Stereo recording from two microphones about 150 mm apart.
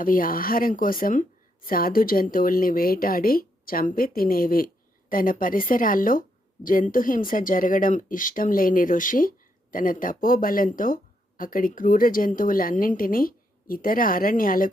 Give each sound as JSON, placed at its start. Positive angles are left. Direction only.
{"t": 0.0, "sound": "a woman's voice", "side_deg": 70}